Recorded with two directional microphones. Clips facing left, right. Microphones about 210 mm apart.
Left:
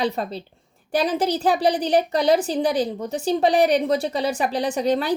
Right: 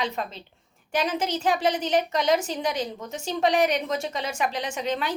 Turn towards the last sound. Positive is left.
turn(degrees=35)  # may be behind; listen again after turning